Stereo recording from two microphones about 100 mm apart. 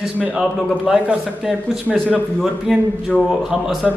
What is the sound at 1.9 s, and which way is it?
Speech, centre (ahead or behind).